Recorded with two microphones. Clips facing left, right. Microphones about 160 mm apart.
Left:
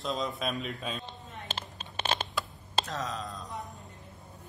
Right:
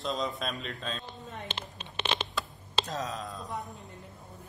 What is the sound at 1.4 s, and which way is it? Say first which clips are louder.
Crumpling: even; 40° left (ahead or behind).